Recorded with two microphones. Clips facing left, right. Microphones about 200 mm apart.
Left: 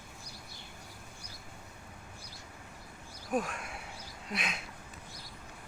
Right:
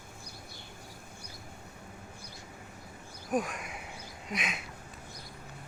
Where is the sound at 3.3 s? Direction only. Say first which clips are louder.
Right 2 dB; centre (ahead or behind).